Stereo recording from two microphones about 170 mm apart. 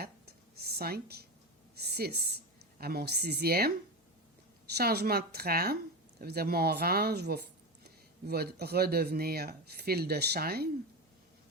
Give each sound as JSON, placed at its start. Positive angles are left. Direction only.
{"t": 0.6, "sound": "a woman's voice", "side_deg": -70}
{"t": 4.7, "sound": "a woman's voice", "side_deg": -70}